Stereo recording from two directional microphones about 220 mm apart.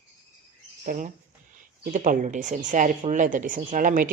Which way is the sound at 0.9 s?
35° right (ahead or behind).